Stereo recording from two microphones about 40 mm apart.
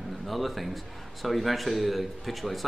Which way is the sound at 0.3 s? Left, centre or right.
Centre.